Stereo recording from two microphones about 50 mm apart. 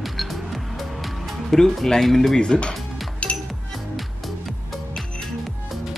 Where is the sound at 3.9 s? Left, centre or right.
Centre.